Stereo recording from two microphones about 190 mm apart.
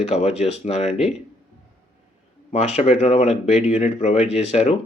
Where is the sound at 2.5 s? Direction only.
35° left (ahead or behind).